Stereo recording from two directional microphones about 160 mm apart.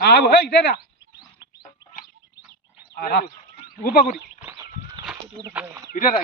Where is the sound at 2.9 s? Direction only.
75° left (ahead or behind).